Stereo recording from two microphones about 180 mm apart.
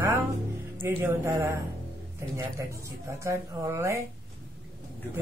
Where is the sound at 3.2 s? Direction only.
15° right (ahead or behind).